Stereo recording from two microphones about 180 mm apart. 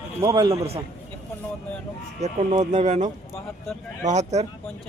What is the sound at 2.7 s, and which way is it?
Speech, 40° right (ahead or behind).